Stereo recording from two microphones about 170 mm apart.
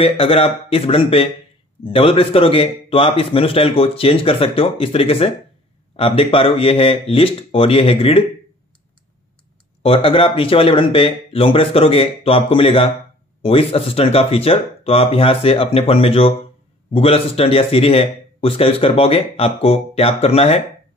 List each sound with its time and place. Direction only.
0.0 s speech: 35° left (ahead or behind)
9.8 s speech: 30° left (ahead or behind)